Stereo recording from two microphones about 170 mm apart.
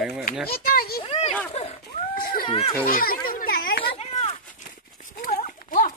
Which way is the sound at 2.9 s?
55° left (ahead or behind).